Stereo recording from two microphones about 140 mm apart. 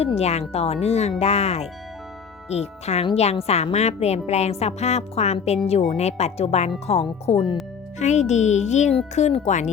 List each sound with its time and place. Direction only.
0.0 s a woman's voice: 50° left (ahead or behind)